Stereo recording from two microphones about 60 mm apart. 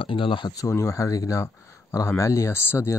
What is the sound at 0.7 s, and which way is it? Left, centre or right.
Speech, left.